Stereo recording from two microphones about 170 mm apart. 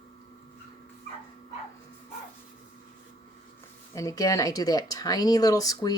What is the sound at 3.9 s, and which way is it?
Speech, 20° left (ahead or behind).